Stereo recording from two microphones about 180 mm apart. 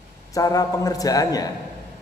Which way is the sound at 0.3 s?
20° left (ahead or behind).